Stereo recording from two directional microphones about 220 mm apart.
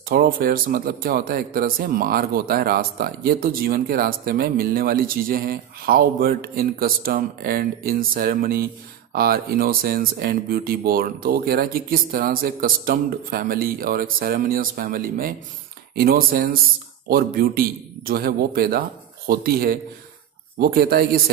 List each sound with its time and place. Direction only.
0.1 s a man's voice: 40° right (ahead or behind)